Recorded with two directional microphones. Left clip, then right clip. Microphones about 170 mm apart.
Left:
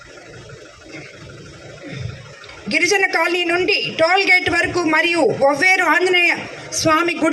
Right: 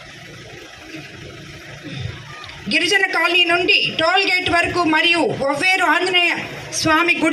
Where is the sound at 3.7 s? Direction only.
65° left (ahead or behind).